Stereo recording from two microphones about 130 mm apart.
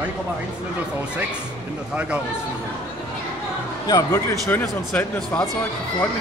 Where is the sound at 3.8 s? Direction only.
25° left (ahead or behind).